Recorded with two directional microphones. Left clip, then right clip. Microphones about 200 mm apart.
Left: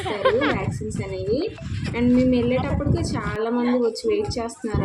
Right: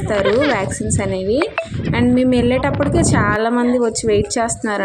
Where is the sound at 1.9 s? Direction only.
40° right (ahead or behind).